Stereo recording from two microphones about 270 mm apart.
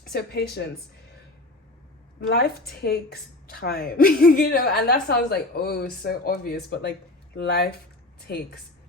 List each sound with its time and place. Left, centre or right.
0.1 s a woman's voice: left
2.2 s a woman's voice: left